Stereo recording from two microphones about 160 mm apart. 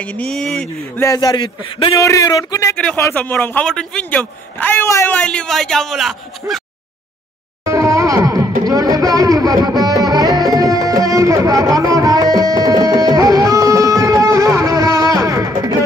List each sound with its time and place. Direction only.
0.0 s speech: 10° left (ahead or behind)
1.0 s a man's voice: 25° left (ahead or behind)
2.0 s a man's voice: 20° left (ahead or behind)
2.7 s speech: 5° left (ahead or behind)
7.6 s music: 20° right (ahead or behind)
8.6 s speech: 25° right (ahead or behind)